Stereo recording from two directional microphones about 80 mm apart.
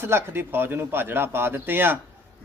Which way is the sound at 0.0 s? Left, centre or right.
Right.